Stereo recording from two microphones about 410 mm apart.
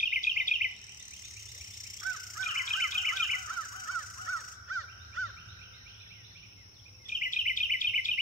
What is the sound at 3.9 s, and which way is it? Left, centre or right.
Crow, right.